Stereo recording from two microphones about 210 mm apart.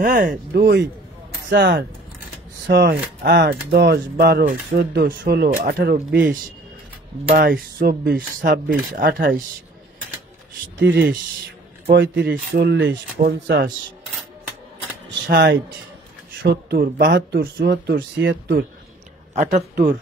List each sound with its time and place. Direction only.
0.0 s speech: 40° right (ahead or behind)
7.3 s speech: 45° right (ahead or behind)
10.8 s speech: 60° right (ahead or behind)
15.0 s speech: 60° right (ahead or behind)
19.3 s speech: 35° right (ahead or behind)